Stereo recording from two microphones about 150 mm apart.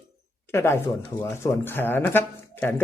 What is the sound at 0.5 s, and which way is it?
Speech, 15° left (ahead or behind).